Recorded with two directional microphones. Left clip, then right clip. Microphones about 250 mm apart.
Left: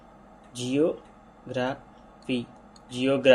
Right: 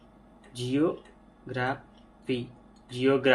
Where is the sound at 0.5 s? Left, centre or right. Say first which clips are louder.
Left 3 dB; left.